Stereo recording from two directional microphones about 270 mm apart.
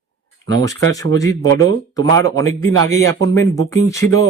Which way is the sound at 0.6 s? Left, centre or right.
Centre.